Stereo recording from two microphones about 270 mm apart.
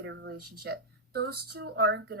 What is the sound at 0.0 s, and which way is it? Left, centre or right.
A woman's voice, right.